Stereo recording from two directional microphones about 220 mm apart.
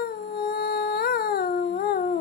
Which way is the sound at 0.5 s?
45° left (ahead or behind).